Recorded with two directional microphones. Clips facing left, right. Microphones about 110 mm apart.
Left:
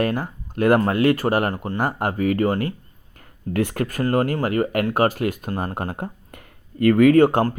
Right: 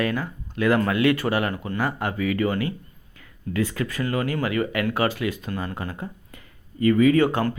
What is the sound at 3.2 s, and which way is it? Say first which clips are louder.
Speech: left 3 dB; 55° left (ahead or behind).